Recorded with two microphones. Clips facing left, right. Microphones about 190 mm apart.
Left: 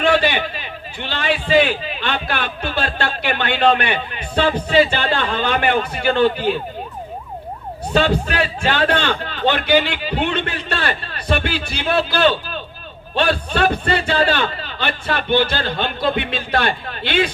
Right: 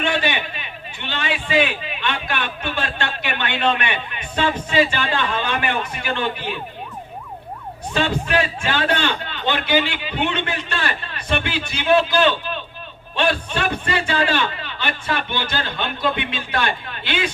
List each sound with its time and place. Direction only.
0.0 s a man's voice: 35° left (ahead or behind)
7.9 s a man's voice: 35° left (ahead or behind)